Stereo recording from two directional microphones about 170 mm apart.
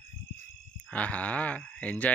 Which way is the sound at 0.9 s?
10° left (ahead or behind).